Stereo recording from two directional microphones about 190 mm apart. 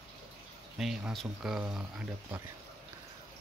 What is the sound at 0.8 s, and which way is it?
Speech, centre (ahead or behind).